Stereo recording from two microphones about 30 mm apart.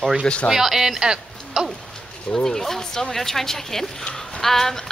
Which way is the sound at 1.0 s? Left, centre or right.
Right.